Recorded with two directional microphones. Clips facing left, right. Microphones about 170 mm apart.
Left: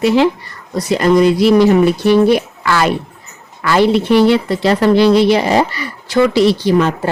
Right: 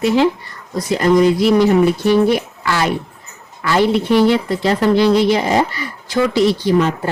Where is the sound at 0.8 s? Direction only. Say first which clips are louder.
Left 2 dB; 75° left (ahead or behind).